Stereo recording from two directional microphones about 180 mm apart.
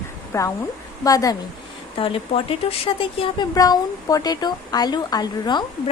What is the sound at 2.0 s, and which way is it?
A woman's voice, 30° left (ahead or behind).